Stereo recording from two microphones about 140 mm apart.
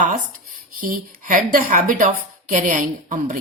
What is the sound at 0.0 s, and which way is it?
A woman's voice, 70° right (ahead or behind).